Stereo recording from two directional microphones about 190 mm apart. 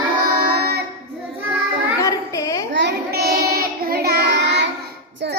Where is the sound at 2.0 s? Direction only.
15° left (ahead or behind).